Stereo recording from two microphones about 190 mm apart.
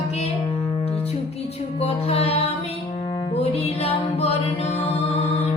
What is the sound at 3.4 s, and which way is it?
Music, 30° left (ahead or behind).